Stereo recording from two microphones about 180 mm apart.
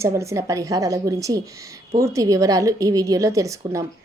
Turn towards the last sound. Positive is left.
turn(degrees=-15)  # may be behind; listen again after turning